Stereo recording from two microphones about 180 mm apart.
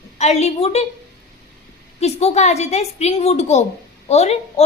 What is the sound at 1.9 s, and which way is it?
A woman's voice, 35° left (ahead or behind).